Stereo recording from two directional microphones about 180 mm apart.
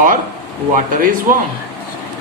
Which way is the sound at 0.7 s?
50° right (ahead or behind).